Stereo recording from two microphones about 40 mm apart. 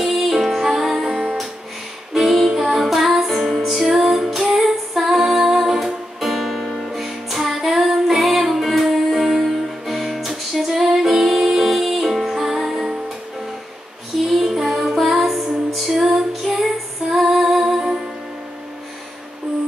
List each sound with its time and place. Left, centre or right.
0.0 s music: centre
1.0 s music: centre
2.1 s music: centre
14.1 s music: centre
16.2 s female singing: centre
17.0 s music: centre